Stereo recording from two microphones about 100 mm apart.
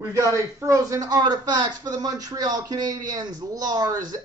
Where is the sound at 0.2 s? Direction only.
30° right (ahead or behind).